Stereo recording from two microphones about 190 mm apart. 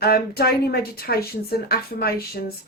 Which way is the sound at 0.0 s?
55° left (ahead or behind).